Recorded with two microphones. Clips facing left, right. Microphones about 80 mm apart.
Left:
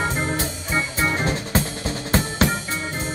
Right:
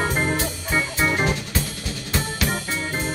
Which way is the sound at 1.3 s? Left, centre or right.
Left.